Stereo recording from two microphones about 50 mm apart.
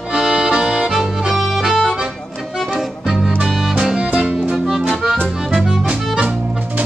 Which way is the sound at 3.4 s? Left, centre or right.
Centre.